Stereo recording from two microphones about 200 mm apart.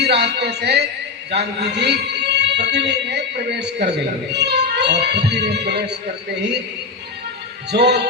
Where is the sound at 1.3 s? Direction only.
55° right (ahead or behind).